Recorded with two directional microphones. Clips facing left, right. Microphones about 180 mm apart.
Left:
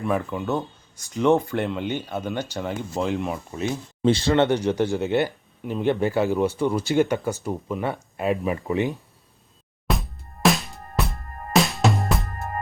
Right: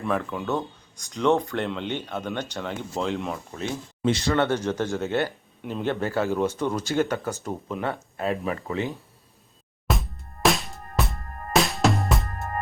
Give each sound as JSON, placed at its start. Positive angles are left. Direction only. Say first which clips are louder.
{"t": 0.0, "sound": "speech", "louder": "left 2 dB", "side_deg": 5}
{"t": 4.0, "sound": "speech", "louder": "left 4 dB", "side_deg": 30}
{"t": 4.4, "sound": "speech", "louder": "left 4 dB", "side_deg": 15}
{"t": 9.8, "sound": "music", "louder": "left 1 dB", "side_deg": 0}